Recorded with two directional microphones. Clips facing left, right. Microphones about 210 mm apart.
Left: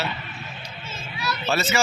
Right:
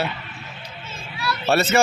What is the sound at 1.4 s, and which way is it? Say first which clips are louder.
Speech: right 6 dB; 60° right (ahead or behind).